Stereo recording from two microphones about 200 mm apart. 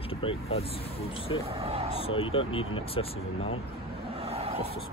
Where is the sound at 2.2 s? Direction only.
30° left (ahead or behind).